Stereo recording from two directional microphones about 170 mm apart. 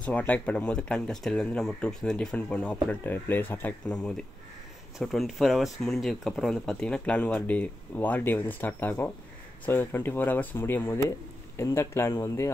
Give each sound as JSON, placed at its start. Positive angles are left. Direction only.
{"t": 0.0, "sound": "speech", "side_deg": 10}